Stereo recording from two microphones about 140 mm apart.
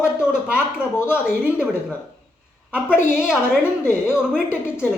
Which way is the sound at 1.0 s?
10° right (ahead or behind).